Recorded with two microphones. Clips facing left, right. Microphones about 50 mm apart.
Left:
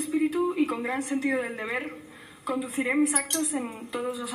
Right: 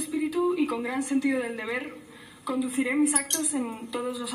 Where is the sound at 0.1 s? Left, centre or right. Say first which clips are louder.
Even; left.